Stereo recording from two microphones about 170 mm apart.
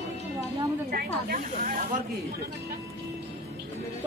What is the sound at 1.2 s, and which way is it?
Snake, 55° right (ahead or behind).